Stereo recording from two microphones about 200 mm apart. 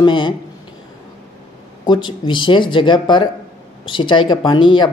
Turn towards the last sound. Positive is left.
turn(degrees=25)  # may be behind; listen again after turning